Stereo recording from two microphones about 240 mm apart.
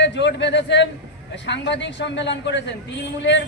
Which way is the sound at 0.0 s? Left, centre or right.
Left.